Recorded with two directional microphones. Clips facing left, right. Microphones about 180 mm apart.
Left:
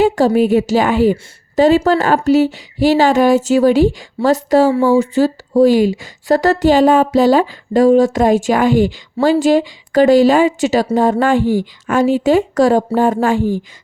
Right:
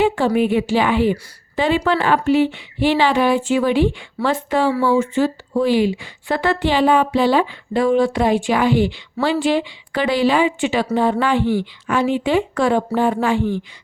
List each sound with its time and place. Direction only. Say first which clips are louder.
0.3 s a woman's voice: left 4 dB; 40° left (ahead or behind)